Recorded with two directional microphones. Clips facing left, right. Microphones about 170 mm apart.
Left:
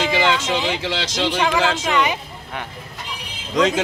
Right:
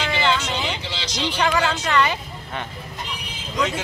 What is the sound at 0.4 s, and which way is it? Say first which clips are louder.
Speech: left 5 dB; 85° left.